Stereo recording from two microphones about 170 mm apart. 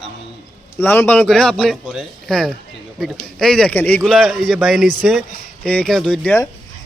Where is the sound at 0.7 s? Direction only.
15° left (ahead or behind).